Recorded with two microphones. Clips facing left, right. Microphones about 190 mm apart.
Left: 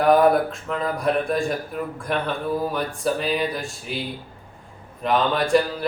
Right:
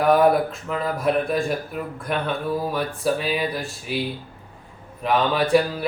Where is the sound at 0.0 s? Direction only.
Centre (ahead or behind).